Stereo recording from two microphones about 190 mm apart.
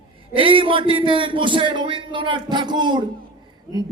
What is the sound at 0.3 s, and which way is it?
A man's voice, 25° right (ahead or behind).